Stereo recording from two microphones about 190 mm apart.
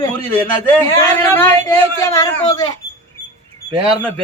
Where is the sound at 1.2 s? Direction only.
10° left (ahead or behind).